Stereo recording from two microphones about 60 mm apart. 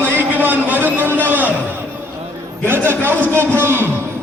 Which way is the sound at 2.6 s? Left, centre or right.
Right.